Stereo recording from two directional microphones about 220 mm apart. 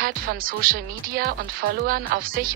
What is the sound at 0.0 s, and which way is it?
Speech, 40° right (ahead or behind).